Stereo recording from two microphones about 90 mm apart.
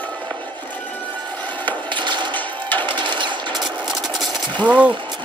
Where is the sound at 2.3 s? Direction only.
20° left (ahead or behind).